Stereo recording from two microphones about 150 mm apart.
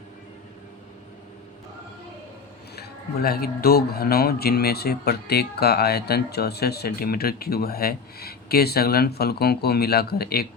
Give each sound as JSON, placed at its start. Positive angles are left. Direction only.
{"t": 2.7, "sound": "speech", "side_deg": 90}